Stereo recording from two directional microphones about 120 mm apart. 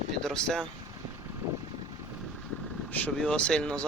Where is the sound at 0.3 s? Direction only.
5° left (ahead or behind).